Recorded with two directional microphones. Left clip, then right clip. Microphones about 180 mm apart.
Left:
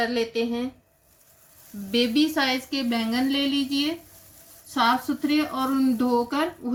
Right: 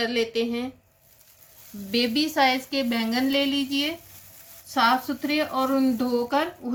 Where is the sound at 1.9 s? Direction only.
30° right (ahead or behind).